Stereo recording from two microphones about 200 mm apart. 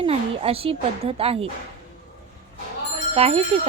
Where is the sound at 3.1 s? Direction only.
30° right (ahead or behind).